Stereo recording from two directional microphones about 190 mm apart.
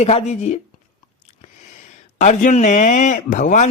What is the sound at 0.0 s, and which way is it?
Speech, 35° left (ahead or behind).